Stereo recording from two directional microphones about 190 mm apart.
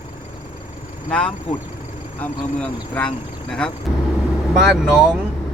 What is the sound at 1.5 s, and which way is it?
Speech, 40° left (ahead or behind).